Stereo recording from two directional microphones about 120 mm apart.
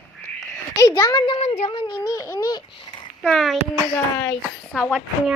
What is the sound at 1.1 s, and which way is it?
A woman's voice, 45° left (ahead or behind).